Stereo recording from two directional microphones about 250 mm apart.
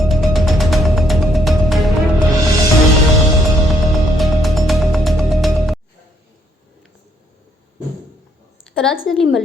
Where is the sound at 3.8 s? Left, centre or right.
Centre.